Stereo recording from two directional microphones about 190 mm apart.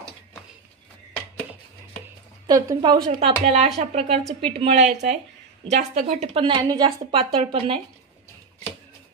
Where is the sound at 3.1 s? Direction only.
35° right (ahead or behind).